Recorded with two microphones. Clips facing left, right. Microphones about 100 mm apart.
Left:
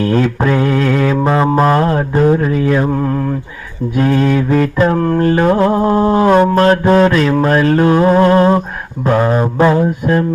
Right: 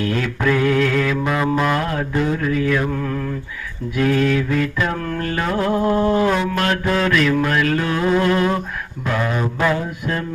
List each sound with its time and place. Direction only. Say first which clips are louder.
0.0 s mantra: left 7 dB; 35° left (ahead or behind)